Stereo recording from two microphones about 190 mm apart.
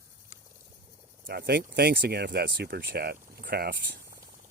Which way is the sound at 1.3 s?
55° right (ahead or behind).